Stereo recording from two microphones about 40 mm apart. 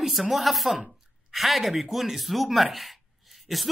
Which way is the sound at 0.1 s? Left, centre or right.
Centre.